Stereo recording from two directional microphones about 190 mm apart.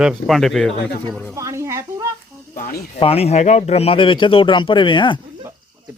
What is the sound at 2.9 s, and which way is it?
Speech, 30° left (ahead or behind).